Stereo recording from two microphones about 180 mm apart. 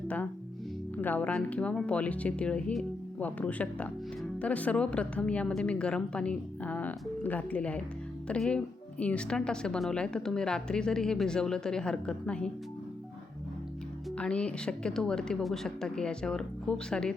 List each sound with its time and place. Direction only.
1.0 s speech: 5° left (ahead or behind)
14.2 s speech: 5° left (ahead or behind)